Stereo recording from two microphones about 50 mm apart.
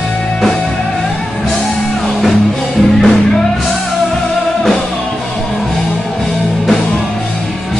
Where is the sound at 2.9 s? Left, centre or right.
Centre.